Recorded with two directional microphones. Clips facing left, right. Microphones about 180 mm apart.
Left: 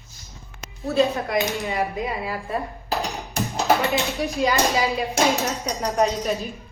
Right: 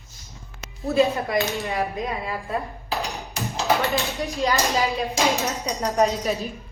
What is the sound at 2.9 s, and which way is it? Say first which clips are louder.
Music: left 3 dB; centre (ahead or behind).